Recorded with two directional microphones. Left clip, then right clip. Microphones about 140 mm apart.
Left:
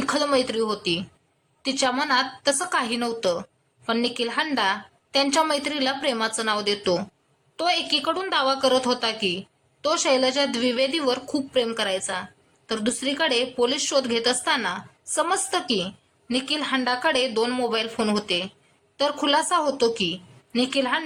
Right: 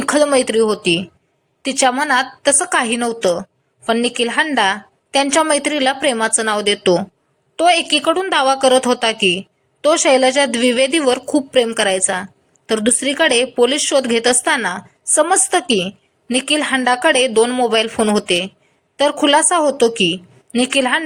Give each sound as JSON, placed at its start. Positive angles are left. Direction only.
{"t": 0.0, "sound": "a woman's voice", "side_deg": -35}